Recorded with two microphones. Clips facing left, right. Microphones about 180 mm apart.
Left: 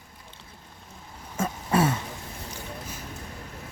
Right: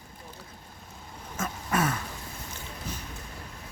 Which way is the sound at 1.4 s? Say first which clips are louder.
Left 5 dB; 30° left (ahead or behind).